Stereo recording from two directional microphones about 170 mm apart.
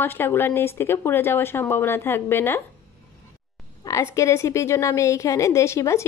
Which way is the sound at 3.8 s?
20° left (ahead or behind).